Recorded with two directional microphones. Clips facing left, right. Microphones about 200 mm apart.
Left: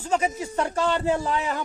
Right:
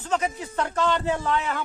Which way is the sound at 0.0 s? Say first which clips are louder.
Left 2 dB; 10° left (ahead or behind).